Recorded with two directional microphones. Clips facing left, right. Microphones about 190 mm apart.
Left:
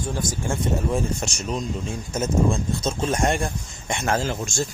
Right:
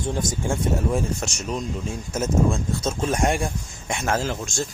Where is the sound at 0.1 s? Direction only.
20° right (ahead or behind).